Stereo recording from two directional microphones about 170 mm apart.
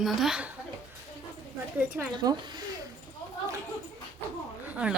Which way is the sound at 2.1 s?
25° right (ahead or behind).